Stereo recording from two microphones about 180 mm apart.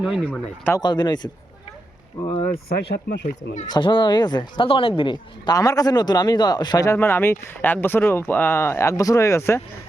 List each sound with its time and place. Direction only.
0.3 s speech: 10° left (ahead or behind)
0.8 s speech: 25° left (ahead or behind)
2.2 s speech: 10° left (ahead or behind)
2.5 s speech: 60° left (ahead or behind)
3.7 s speech: 25° left (ahead or behind)